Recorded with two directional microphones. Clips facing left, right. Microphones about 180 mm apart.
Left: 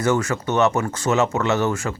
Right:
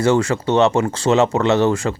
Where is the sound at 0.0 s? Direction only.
30° right (ahead or behind).